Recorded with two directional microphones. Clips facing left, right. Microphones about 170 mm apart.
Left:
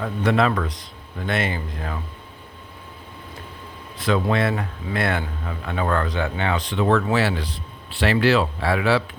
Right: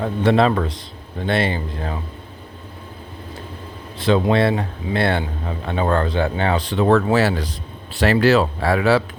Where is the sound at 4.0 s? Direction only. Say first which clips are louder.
Right 4 dB; 25° right (ahead or behind).